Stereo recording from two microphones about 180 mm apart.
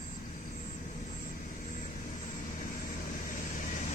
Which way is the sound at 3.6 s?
40° left (ahead or behind).